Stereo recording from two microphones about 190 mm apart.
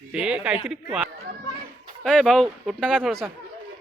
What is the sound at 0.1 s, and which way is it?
Speech, 5° right (ahead or behind).